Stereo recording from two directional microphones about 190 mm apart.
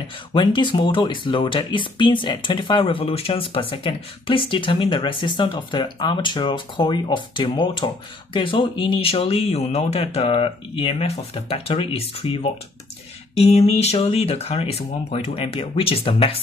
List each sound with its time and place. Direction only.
0.3 s speech: 25° left (ahead or behind)